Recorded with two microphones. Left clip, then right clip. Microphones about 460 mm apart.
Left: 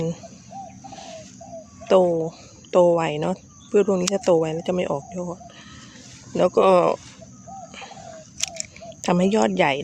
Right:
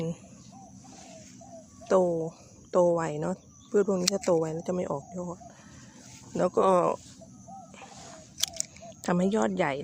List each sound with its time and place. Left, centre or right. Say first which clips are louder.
1.8 s speech: left 7 dB; left
8.4 s a sound: left 3 dB; left
9.0 s speech: left 7 dB; left